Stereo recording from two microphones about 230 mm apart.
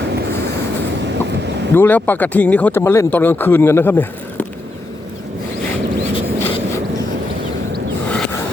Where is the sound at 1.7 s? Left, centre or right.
Centre.